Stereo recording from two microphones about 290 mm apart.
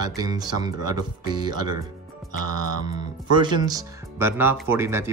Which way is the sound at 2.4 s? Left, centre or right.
Left.